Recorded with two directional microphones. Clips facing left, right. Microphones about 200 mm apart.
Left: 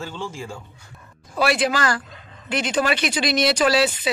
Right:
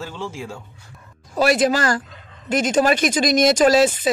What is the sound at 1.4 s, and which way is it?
Speech, 45° right (ahead or behind).